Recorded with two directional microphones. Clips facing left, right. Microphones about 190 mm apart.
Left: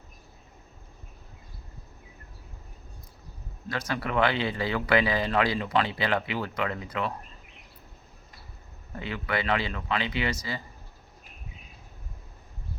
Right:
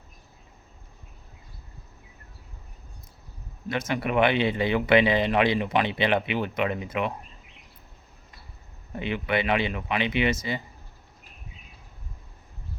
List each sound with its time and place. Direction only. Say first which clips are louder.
3.7 s speech: right 4 dB; 20° right (ahead or behind)
9.0 s speech: right 4 dB; 20° right (ahead or behind)